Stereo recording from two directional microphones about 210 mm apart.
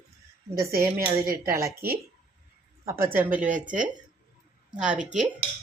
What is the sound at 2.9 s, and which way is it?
Speech, 10° right (ahead or behind).